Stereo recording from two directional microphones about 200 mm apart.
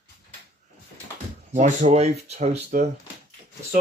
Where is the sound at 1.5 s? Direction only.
40° right (ahead or behind).